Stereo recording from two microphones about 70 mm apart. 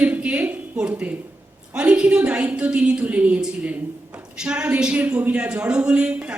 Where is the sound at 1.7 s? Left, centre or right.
Centre.